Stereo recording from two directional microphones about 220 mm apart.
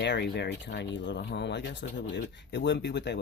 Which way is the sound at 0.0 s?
50° left (ahead or behind).